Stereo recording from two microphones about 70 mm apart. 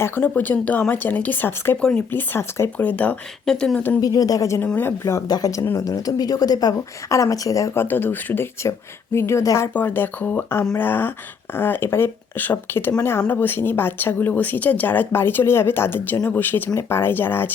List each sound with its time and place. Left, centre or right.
0.0 s speech: left
1.8 s speech: centre
2.1 s speech: left
2.7 s speech: left
3.4 s speech: centre
4.0 s a woman's voice: left
4.6 s speech: left
5.3 s a woman's voice: left
7.7 s speech: left
9.7 s speech: left